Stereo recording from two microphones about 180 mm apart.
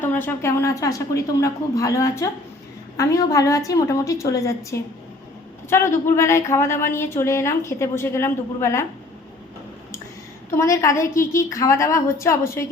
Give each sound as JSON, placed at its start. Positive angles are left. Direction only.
{"t": 0.0, "sound": "a woman's voice", "side_deg": 10}
{"t": 10.5, "sound": "a woman's voice", "side_deg": 15}